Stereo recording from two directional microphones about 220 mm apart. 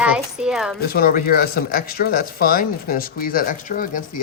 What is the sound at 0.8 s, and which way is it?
Speech, 45° left (ahead or behind).